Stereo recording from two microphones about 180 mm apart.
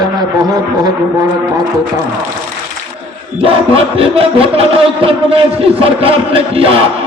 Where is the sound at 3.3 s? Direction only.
30° right (ahead or behind).